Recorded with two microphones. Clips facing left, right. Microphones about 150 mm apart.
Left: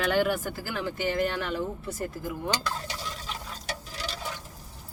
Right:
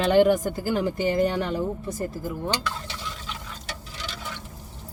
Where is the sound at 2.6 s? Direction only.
40° left (ahead or behind).